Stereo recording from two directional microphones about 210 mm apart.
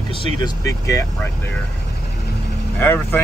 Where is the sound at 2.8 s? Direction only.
10° left (ahead or behind).